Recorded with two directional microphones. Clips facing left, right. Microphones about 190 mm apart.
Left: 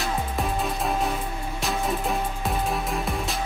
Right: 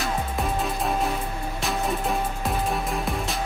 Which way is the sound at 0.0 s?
Centre (ahead or behind).